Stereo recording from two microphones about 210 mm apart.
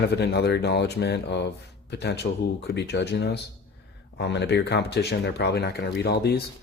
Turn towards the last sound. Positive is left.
turn(degrees=50)  # may be behind; listen again after turning